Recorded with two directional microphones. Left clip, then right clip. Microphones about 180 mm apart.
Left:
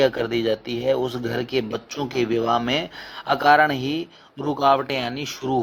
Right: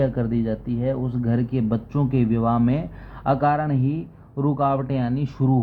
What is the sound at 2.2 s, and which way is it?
Speech, 25° left (ahead or behind).